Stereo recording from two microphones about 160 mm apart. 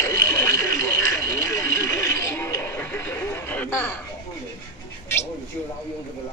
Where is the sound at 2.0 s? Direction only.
15° left (ahead or behind).